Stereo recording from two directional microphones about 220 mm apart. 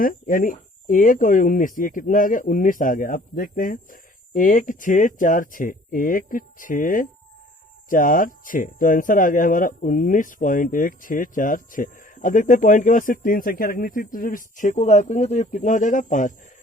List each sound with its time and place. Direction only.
0.0 s speech: 40° left (ahead or behind)